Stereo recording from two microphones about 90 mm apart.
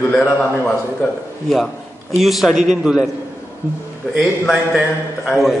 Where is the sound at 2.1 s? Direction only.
Centre (ahead or behind).